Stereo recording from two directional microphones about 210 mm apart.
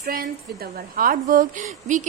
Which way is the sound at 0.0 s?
45° right (ahead or behind).